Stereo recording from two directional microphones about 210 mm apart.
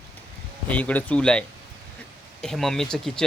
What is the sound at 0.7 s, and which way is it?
A man's voice, 5° left (ahead or behind).